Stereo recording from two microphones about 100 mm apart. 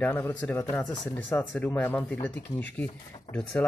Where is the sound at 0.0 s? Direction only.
15° left (ahead or behind).